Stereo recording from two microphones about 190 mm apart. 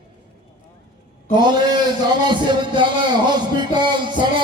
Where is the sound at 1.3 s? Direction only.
20° right (ahead or behind).